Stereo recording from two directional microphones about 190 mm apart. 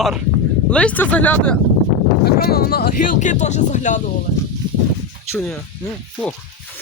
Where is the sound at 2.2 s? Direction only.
55° left (ahead or behind).